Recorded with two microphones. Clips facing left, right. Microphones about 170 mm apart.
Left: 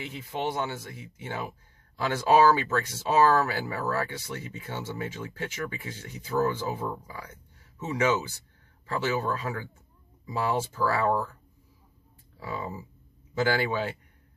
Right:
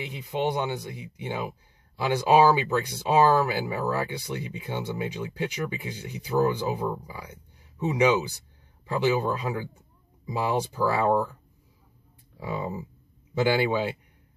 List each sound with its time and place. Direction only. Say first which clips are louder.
0.0 s speech: right 4 dB; 15° right (ahead or behind)
12.4 s speech: right 4 dB; 20° right (ahead or behind)